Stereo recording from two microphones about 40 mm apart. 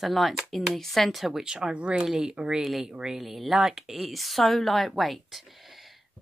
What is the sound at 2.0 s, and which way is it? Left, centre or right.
Speech, centre.